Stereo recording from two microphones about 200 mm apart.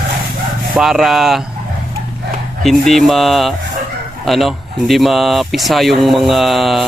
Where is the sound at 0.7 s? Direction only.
Centre (ahead or behind).